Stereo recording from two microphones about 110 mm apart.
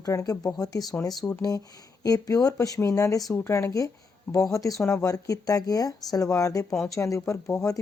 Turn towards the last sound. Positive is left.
turn(degrees=30)  # may be behind; listen again after turning